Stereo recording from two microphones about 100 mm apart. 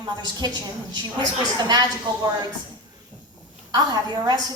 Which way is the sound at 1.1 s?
45° right (ahead or behind).